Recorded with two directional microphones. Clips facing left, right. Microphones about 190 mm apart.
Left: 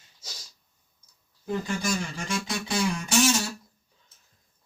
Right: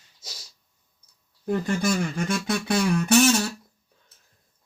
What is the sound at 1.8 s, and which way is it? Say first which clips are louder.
Speech: right 6 dB; 60° right (ahead or behind).